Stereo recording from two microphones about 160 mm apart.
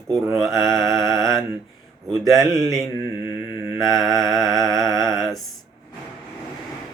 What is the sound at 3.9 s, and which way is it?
Mantra, centre (ahead or behind).